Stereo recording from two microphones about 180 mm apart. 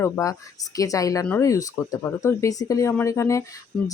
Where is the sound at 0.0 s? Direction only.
15° left (ahead or behind).